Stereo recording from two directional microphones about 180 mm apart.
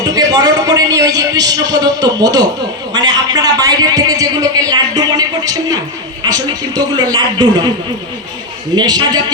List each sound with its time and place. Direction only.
0.0 s a man's voice: 20° right (ahead or behind)
8.7 s a man's voice: 25° right (ahead or behind)